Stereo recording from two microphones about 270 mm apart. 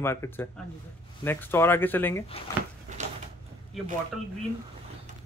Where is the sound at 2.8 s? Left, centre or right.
Right.